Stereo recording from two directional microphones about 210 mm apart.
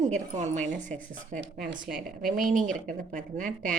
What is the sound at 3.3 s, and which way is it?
Speech, 35° right (ahead or behind).